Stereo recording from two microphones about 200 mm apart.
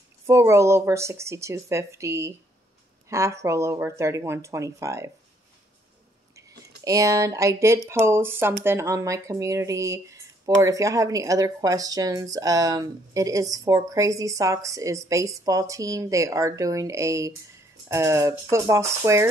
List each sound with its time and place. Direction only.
0.3 s speech: 15° right (ahead or behind)
6.8 s speech: 15° right (ahead or behind)